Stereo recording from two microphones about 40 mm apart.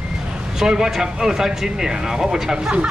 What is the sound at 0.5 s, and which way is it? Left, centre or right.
Speech, centre.